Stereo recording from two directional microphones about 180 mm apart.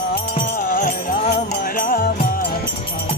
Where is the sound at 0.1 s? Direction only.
50° left (ahead or behind).